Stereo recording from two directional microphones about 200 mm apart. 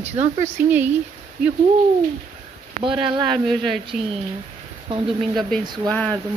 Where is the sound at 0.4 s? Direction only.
10° right (ahead or behind).